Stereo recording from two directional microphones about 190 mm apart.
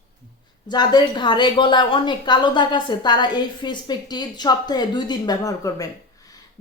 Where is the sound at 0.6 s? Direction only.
20° left (ahead or behind).